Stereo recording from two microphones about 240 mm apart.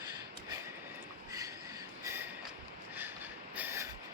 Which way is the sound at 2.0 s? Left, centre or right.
Centre.